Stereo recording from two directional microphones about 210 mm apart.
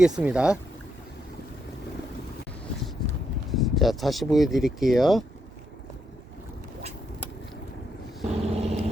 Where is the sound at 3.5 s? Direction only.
Centre (ahead or behind).